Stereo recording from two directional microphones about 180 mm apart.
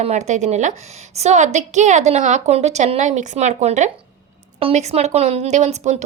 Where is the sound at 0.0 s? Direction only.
40° right (ahead or behind).